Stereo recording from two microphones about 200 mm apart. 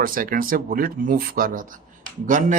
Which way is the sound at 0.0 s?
45° right (ahead or behind).